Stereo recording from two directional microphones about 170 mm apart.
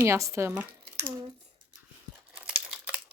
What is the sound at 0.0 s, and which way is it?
Speech, 15° right (ahead or behind).